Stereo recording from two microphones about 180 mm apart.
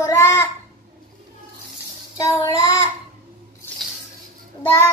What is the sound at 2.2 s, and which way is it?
Child singing, 20° left (ahead or behind).